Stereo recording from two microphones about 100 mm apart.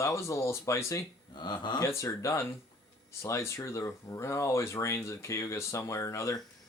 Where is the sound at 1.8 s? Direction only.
30° left (ahead or behind).